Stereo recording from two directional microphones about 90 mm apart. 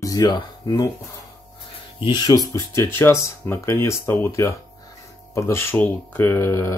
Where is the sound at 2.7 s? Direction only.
25° left (ahead or behind).